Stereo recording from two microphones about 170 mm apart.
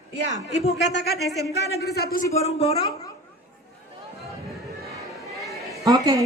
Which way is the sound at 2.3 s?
40° left (ahead or behind).